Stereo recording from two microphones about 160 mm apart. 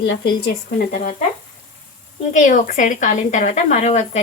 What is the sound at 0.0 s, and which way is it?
Speech, 80° left.